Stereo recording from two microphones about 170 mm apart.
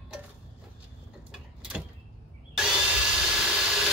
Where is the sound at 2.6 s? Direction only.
5° right (ahead or behind).